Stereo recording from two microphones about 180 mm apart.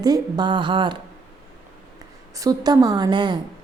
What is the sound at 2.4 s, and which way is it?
A woman's voice, 20° right (ahead or behind).